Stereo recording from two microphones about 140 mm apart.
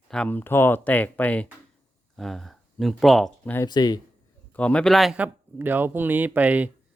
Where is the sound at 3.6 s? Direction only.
30° left (ahead or behind).